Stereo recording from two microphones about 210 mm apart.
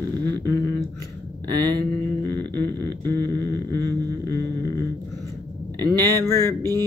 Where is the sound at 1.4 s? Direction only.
20° right (ahead or behind).